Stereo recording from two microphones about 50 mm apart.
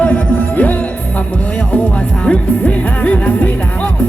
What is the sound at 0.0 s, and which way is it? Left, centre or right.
Music, left.